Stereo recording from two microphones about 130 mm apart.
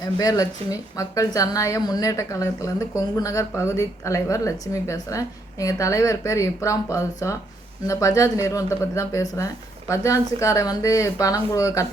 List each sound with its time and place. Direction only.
0.2 s a woman's voice: 30° left (ahead or behind)